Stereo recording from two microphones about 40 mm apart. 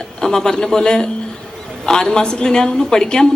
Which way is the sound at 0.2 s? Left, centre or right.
Centre.